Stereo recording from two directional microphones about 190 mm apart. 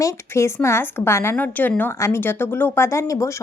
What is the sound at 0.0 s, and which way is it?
A woman's voice, 15° left (ahead or behind).